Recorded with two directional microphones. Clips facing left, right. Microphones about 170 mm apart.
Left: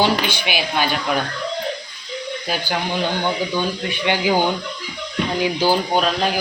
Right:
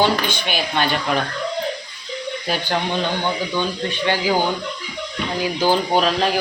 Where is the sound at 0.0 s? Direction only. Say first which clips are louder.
Even; 10° left (ahead or behind).